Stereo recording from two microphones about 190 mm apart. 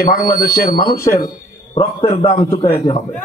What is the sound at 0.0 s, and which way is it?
Speech, 50° left (ahead or behind).